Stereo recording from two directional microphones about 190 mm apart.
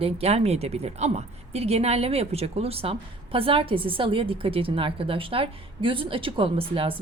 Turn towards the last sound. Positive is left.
turn(degrees=-30)  # may be behind; listen again after turning